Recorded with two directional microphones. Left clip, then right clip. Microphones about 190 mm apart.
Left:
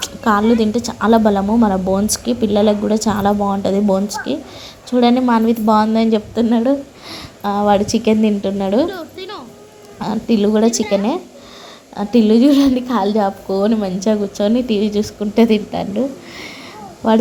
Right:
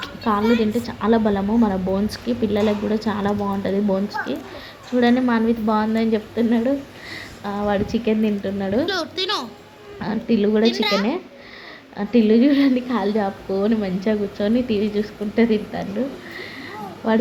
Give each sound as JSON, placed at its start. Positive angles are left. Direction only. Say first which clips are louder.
{"t": 0.0, "sound": "a woman's voice", "louder": "left 6 dB", "side_deg": 20}
{"t": 8.9, "sound": "speech", "louder": "right 5 dB", "side_deg": -5}
{"t": 10.0, "sound": "a woman's voice", "louder": "left 4 dB", "side_deg": 20}
{"t": 10.7, "sound": "a woman's voice", "louder": "left 3 dB", "side_deg": -20}
{"t": 11.9, "sound": "a woman's voice", "louder": "left 3 dB", "side_deg": 15}